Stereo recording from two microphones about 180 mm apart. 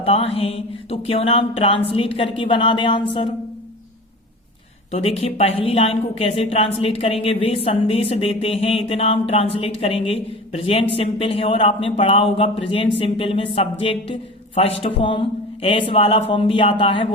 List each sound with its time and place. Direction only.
0.0 s speech: 35° left (ahead or behind)
4.9 s speech: 35° left (ahead or behind)